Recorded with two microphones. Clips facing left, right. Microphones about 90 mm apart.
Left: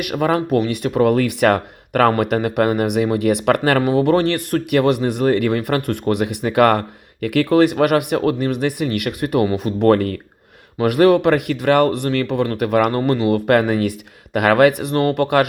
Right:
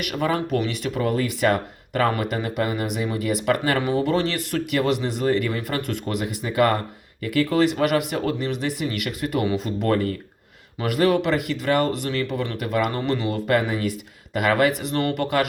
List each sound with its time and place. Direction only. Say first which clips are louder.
0.0 s speech: left 5 dB; 50° left (ahead or behind)
9.6 s speech: left 7 dB; 60° left (ahead or behind)
13.0 s speech: left 7 dB; 40° left (ahead or behind)
13.3 s speech: left 6 dB; 55° left (ahead or behind)
14.9 s speech: left 6 dB; 45° left (ahead or behind)